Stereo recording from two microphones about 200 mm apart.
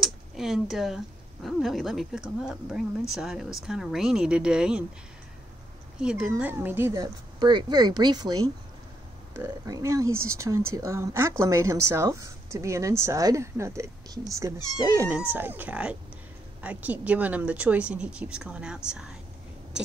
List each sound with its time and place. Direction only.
0.0 s speech: centre (ahead or behind)
5.9 s speech: 5° right (ahead or behind)
10.0 s speech: 90° right
10.4 s speech: 15° right (ahead or behind)